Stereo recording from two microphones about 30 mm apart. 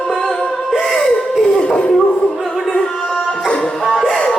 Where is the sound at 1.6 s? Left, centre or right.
Left.